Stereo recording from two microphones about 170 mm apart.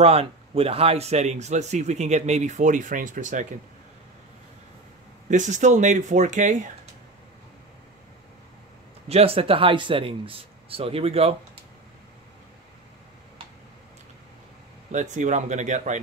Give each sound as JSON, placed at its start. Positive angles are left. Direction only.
{"t": 0.0, "sound": "speech", "side_deg": -35}
{"t": 5.3, "sound": "speech", "side_deg": -45}
{"t": 9.1, "sound": "speech", "side_deg": -35}
{"t": 14.9, "sound": "speech", "side_deg": -45}